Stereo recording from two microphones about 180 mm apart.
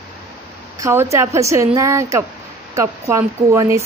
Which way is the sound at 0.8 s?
15° right (ahead or behind).